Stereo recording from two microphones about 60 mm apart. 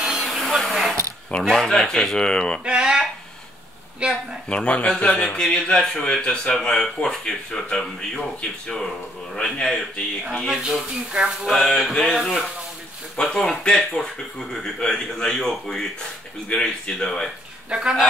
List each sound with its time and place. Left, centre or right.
0.2 s a sound: centre
1.4 s speech: centre
2.6 s speech: centre
4.5 s speech: centre
10.5 s speech: centre
11.4 s a sound: centre
13.1 s speech: centre
17.6 s speech: centre